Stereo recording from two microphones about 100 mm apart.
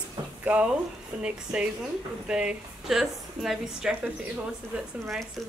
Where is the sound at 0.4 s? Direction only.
15° right (ahead or behind).